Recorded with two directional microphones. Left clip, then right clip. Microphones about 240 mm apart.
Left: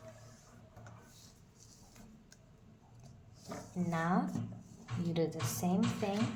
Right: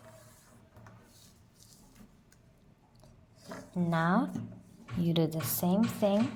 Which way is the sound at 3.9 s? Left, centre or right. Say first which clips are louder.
Right 5 dB; right.